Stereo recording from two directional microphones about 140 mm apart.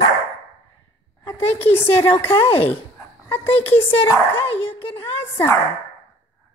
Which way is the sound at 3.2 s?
15° left (ahead or behind).